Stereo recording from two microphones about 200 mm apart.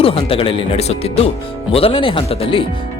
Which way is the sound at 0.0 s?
30° left (ahead or behind).